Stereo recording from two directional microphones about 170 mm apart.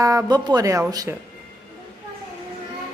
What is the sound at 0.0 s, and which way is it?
Speech, 20° right (ahead or behind).